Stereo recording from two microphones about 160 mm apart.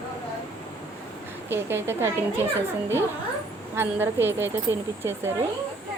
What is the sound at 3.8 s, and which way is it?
Speech, 15° right (ahead or behind).